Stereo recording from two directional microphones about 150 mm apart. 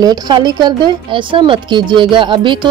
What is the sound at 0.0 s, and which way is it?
A woman's voice, 25° right (ahead or behind).